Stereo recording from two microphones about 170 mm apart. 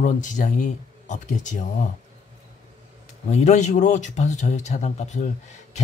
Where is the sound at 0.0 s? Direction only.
50° left (ahead or behind).